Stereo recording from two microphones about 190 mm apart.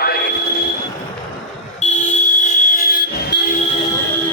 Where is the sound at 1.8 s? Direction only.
40° left (ahead or behind).